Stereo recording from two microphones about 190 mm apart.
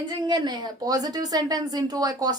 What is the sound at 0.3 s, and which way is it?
A woman's voice, 25° right (ahead or behind).